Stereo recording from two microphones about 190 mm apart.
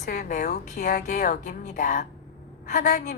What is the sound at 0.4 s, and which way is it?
A woman's voice, 40° left (ahead or behind).